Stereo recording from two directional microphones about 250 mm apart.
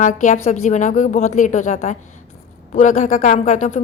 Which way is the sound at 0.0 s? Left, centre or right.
Left.